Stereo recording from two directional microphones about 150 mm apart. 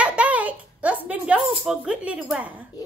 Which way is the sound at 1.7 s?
5° right (ahead or behind).